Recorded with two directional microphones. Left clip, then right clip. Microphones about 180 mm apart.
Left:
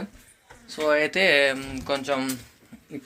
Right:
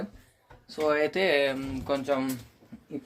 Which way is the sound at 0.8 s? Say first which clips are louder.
Left 4 dB; centre (ahead or behind).